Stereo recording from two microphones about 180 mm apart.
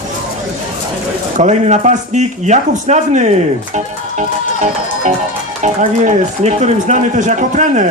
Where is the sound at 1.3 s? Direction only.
40° right (ahead or behind).